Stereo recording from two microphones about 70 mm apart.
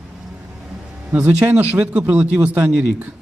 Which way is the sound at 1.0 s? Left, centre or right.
Right.